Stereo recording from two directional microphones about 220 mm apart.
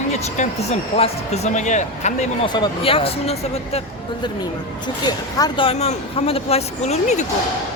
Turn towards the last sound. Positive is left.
turn(degrees=30)  # may be behind; listen again after turning